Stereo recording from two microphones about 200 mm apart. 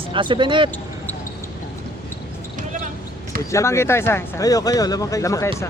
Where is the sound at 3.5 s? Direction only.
15° left (ahead or behind).